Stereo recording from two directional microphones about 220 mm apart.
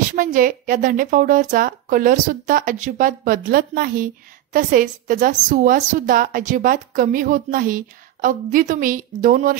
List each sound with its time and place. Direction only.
0.1 s a woman's voice: 40° right (ahead or behind)